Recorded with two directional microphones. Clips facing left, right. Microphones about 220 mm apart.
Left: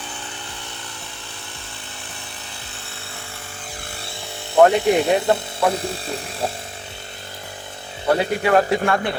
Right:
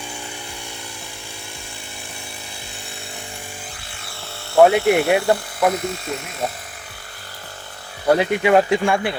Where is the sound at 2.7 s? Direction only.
15° right (ahead or behind).